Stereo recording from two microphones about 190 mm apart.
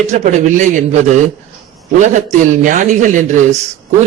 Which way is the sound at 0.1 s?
40° right (ahead or behind).